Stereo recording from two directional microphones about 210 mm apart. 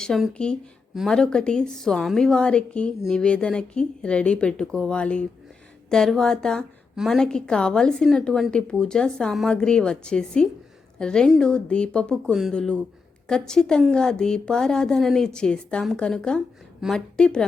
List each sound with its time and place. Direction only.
0.0 s a woman's voice: 5° left (ahead or behind)